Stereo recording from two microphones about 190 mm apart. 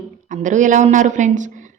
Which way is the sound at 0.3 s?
40° right (ahead or behind).